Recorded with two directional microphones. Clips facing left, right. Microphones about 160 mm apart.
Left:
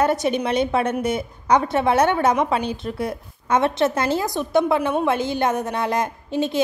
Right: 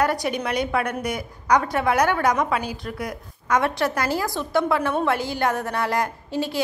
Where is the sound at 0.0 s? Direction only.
25° left (ahead or behind).